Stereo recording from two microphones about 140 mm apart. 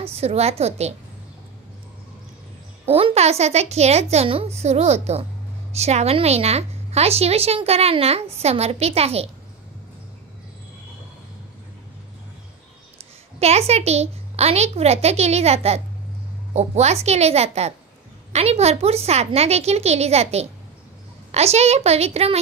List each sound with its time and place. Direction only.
0.0 s a woman's voice: 50° right (ahead or behind)
2.8 s a woman's voice: 45° right (ahead or behind)
13.4 s a woman's voice: 50° right (ahead or behind)